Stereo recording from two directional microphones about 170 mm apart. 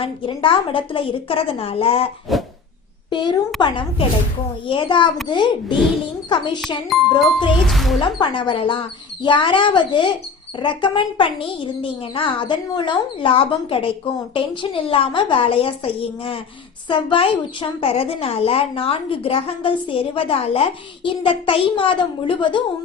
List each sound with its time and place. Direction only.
0.0 s a woman's voice: 30° left (ahead or behind)
2.3 s speech: centre (ahead or behind)
3.1 s a woman's voice: 25° left (ahead or behind)
6.9 s speech: centre (ahead or behind)
8.0 s a woman's voice: 30° left (ahead or behind)